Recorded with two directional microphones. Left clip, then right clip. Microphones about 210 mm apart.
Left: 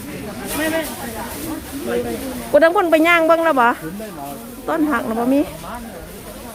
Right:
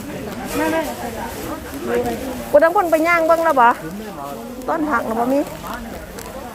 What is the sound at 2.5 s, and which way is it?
Speech, 40° left (ahead or behind).